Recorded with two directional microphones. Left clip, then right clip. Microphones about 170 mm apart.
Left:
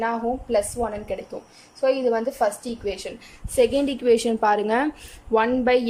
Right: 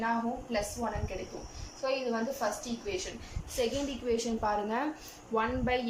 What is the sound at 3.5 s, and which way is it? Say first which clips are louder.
A woman's voice: left 13 dB; 70° left (ahead or behind).